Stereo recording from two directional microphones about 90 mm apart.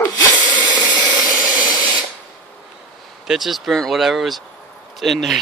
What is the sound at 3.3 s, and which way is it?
Speech, centre (ahead or behind).